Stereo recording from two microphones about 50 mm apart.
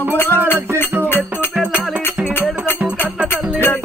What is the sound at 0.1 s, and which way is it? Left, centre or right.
Music, left.